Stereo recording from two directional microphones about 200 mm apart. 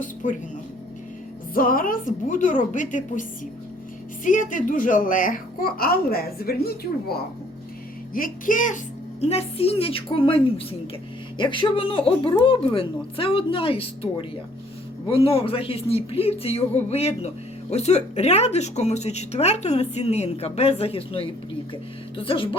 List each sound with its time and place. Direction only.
0.0 s speech: 40° left (ahead or behind)
1.5 s speech: 45° left (ahead or behind)
8.1 s speech: 45° left (ahead or behind)
9.3 s a woman's voice: 30° left (ahead or behind)